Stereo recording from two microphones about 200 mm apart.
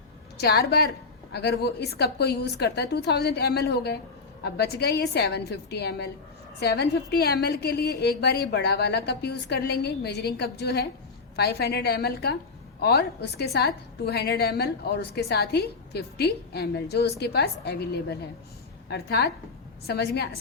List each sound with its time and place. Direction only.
0.3 s a woman's voice: 50° left (ahead or behind)